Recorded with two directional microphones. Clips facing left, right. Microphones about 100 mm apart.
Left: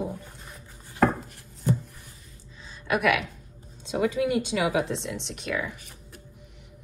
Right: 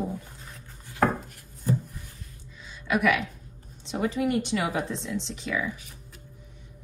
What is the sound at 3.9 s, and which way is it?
Speech, 90° left.